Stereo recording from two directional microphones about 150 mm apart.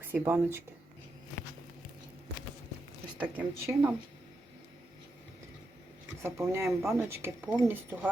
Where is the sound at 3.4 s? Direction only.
15° right (ahead or behind).